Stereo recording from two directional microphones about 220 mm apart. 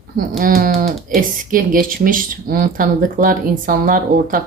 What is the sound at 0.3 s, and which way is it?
Speech, 40° right (ahead or behind).